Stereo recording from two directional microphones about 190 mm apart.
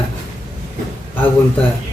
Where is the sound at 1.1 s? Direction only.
10° left (ahead or behind).